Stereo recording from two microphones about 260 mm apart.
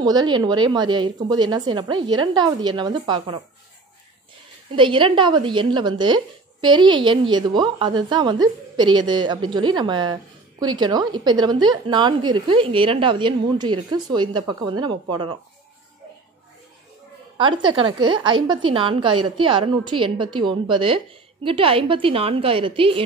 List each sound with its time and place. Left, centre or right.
0.0 s a woman's voice: centre
4.7 s a woman's voice: centre
17.4 s a woman's voice: centre